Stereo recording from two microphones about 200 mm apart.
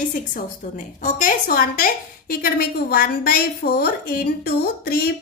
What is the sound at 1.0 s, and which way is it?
A woman's voice, 40° left (ahead or behind).